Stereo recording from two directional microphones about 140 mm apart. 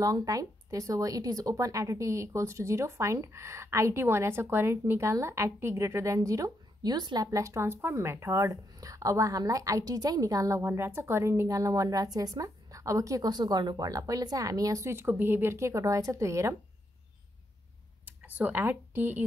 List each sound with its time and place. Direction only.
0.0 s speech: 25° right (ahead or behind)
18.0 s speech: 10° right (ahead or behind)